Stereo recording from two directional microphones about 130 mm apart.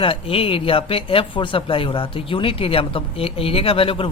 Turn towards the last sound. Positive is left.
turn(degrees=40)  # may be behind; listen again after turning